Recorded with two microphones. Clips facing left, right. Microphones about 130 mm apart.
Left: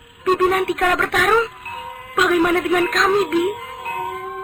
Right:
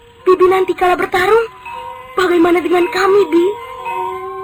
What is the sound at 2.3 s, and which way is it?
Speech, 45° right (ahead or behind).